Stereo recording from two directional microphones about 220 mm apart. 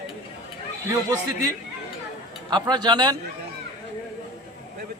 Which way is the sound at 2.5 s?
20° right (ahead or behind).